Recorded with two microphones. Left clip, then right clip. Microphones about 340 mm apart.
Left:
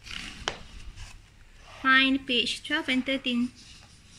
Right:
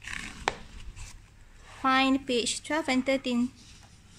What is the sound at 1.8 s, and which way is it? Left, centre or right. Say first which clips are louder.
Speech: left 3 dB; centre.